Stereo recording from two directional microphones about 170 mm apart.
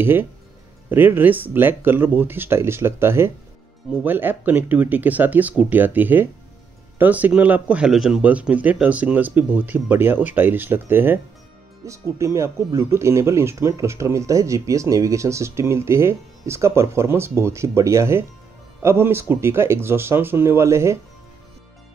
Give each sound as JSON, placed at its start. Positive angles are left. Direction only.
{"t": 0.0, "sound": "speech", "side_deg": -15}